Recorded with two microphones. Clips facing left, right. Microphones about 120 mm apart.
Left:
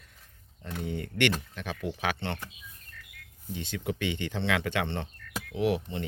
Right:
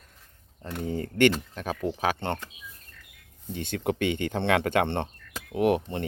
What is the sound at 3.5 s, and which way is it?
Speech, 55° right (ahead or behind).